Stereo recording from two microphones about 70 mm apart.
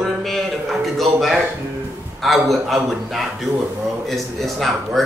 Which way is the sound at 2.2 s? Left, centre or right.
Centre.